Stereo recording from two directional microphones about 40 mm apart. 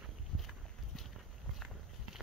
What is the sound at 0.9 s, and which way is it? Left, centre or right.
Walk, centre.